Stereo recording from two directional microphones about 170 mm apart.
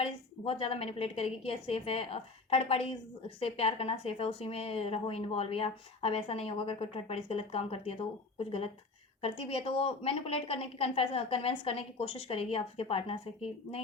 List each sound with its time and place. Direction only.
0.0 s speech: 35° left (ahead or behind)